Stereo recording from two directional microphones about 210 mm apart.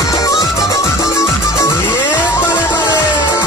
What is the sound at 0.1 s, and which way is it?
Music, 15° left (ahead or behind).